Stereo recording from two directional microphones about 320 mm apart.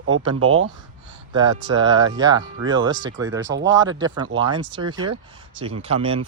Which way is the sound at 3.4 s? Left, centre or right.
Right.